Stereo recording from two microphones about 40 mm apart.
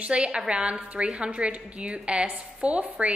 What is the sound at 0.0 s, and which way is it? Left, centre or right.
A woman's voice, right.